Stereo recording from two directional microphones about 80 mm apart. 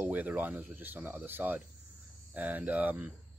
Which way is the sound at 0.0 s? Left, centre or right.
Right.